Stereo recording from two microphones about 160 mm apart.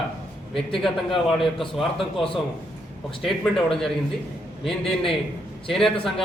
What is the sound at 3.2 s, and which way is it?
Speech, centre (ahead or behind).